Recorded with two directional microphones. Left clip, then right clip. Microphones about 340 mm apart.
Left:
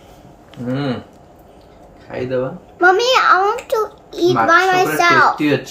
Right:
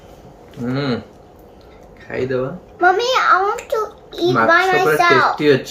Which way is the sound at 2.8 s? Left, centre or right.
Left.